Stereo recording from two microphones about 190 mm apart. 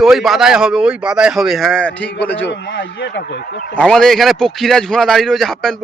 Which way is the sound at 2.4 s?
65° left (ahead or behind).